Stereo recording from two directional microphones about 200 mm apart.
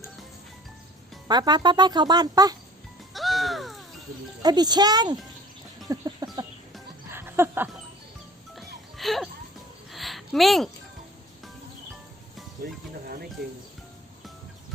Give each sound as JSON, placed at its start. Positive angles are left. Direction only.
{"t": 1.3, "sound": "speech", "side_deg": -20}
{"t": 3.1, "sound": "music", "side_deg": 0}
{"t": 4.4, "sound": "speech", "side_deg": -20}
{"t": 5.9, "sound": "chicken", "side_deg": -20}
{"t": 7.1, "sound": "a sound", "side_deg": -10}
{"t": 8.5, "sound": "music", "side_deg": 0}
{"t": 9.9, "sound": "a sound", "side_deg": 0}